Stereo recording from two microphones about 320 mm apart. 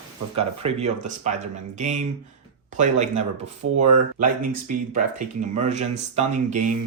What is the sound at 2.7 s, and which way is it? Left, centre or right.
Speech, right.